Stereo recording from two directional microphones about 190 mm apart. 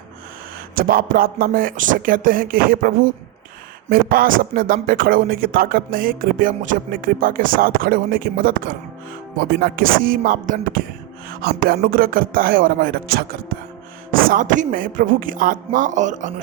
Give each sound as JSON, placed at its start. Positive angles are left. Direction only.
{"t": 0.8, "sound": "speech", "side_deg": -50}